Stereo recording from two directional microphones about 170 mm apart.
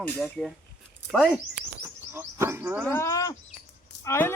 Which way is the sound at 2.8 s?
15° left (ahead or behind).